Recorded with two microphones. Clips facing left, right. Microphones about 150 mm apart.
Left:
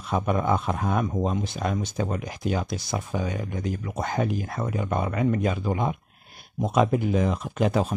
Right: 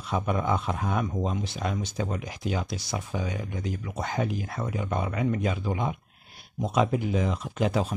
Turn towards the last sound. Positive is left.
turn(degrees=50)  # may be behind; listen again after turning